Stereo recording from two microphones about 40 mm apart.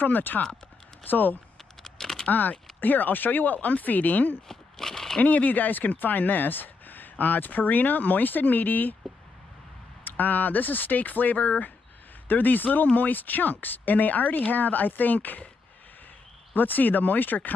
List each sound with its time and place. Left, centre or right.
0.0 s speech: left
1.9 s a sound: centre
2.2 s speech: left
4.5 s a sound: centre
5.2 s speech: left
10.0 s speech: left
12.3 s speech: left
16.5 s speech: left